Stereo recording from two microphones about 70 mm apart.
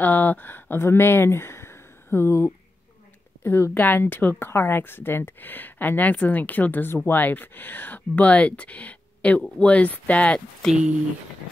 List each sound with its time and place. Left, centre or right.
0.0 s speech: left
10.6 s speech: centre